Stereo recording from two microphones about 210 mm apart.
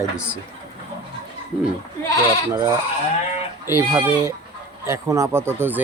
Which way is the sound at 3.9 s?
15° right (ahead or behind).